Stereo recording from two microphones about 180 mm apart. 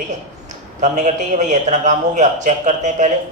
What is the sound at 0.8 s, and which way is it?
A man's voice, 40° right (ahead or behind).